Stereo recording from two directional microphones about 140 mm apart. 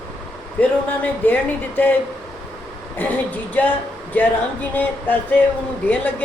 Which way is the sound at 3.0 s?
10° left (ahead or behind).